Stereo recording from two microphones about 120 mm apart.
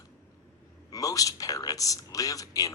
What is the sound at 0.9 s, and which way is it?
A man's voice, 30° left (ahead or behind).